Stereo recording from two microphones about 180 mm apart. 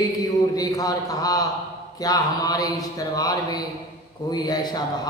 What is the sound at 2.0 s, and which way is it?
Speech, 20° left (ahead or behind).